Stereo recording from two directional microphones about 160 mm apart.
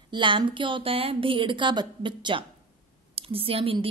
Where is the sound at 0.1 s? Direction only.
30° right (ahead or behind).